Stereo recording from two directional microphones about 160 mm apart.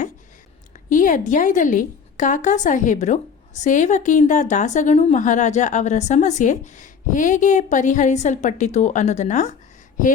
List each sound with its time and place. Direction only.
0.7 s a woman's voice: 55° left (ahead or behind)